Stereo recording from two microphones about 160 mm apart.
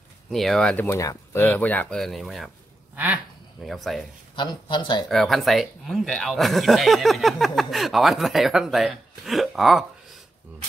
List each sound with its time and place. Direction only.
0.3 s speech: centre (ahead or behind)
3.6 s speech: centre (ahead or behind)
4.4 s speech: 30° left (ahead or behind)
5.1 s speech: centre (ahead or behind)